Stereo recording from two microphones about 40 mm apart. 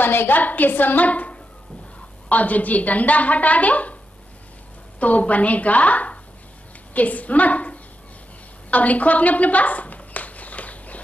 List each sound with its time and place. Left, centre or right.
0.0 s a woman's voice: left
0.4 s a woman's voice: left
5.0 s a woman's voice: left
8.6 s a sound: left